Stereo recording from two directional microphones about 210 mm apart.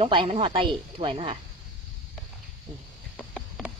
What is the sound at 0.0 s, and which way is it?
Speech, 25° right (ahead or behind).